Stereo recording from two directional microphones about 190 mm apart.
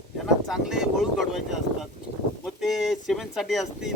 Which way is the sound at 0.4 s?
Centre (ahead or behind).